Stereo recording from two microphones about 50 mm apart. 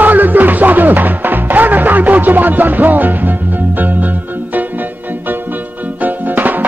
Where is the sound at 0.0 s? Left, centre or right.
Right.